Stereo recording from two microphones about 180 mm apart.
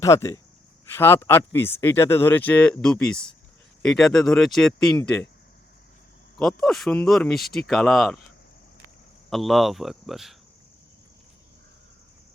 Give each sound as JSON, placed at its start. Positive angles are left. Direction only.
{"t": 0.0, "sound": "speech", "side_deg": 15}
{"t": 6.4, "sound": "speech", "side_deg": 0}
{"t": 9.3, "sound": "speech", "side_deg": 0}